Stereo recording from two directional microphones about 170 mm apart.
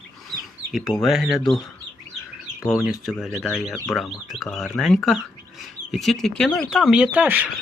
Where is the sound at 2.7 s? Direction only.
Centre (ahead or behind).